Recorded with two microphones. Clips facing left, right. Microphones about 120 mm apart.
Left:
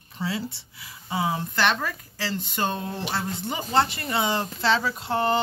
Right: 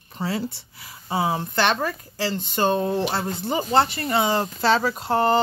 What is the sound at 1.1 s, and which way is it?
Speech, 35° right (ahead or behind).